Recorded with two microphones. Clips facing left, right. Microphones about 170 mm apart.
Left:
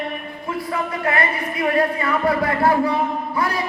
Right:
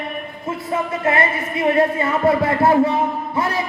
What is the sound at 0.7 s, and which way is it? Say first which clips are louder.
Speech: right 3 dB; 25° right (ahead or behind).